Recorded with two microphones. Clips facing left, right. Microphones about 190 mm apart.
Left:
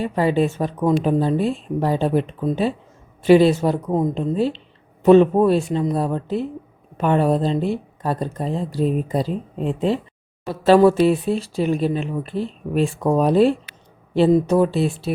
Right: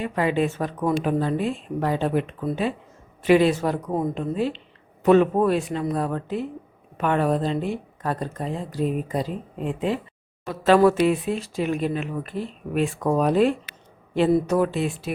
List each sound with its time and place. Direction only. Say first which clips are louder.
0.0 s speech: left 4 dB; 35° left (ahead or behind)
14.3 s speech: left 4 dB; 20° left (ahead or behind)